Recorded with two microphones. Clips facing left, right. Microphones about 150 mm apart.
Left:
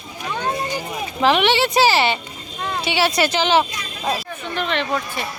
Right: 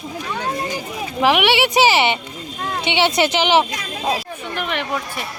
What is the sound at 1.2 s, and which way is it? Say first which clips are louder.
Speech: right 1 dB; 10° right (ahead or behind).